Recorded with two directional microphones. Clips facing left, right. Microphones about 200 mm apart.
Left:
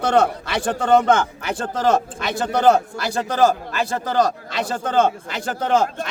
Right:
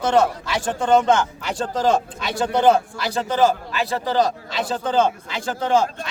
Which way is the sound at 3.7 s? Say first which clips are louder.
Even; 45° left (ahead or behind).